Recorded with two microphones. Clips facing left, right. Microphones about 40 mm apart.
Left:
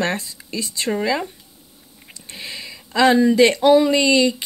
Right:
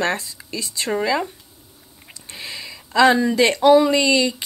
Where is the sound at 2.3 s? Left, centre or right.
Centre.